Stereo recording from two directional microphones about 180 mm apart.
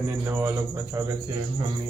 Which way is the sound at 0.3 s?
15° right (ahead or behind).